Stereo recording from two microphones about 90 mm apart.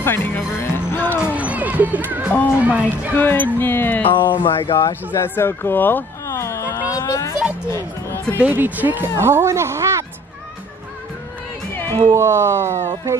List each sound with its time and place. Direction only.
0.0 s music: 25° left (ahead or behind)
1.2 s music: 15° right (ahead or behind)
2.3 s speech: 25° left (ahead or behind)
4.1 s speech: 65° left (ahead or behind)
5.1 s speech: 25° left (ahead or behind)
6.2 s a sound: 35° left (ahead or behind)
7.7 s speech: 30° left (ahead or behind)
8.4 s a woman's voice: 20° right (ahead or behind)
12.0 s speech: 35° right (ahead or behind)